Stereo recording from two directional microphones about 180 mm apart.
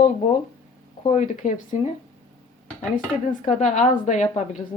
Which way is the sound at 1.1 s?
45° left (ahead or behind).